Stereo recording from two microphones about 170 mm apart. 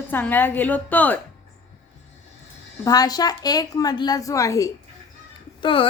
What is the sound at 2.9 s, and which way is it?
A woman's voice, 20° left (ahead or behind).